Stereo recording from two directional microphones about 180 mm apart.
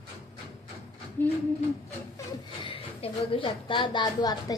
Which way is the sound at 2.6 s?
30° left (ahead or behind).